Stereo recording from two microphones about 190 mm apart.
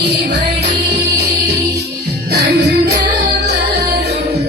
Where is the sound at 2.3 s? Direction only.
60° right (ahead or behind).